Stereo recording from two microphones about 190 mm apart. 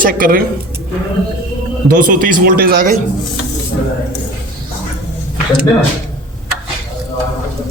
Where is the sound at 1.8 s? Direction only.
45° right (ahead or behind).